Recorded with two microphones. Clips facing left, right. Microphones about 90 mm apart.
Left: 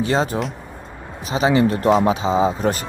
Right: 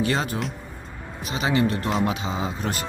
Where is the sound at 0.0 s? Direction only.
25° left (ahead or behind).